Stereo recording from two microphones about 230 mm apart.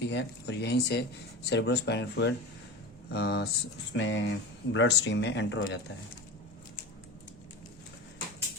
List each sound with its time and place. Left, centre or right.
0.0 s speech: left